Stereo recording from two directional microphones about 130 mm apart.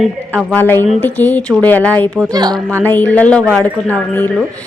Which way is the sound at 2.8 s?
15° left (ahead or behind).